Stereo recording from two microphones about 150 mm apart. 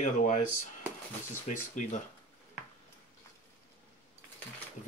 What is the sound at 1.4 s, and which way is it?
Speech, 55° left (ahead or behind).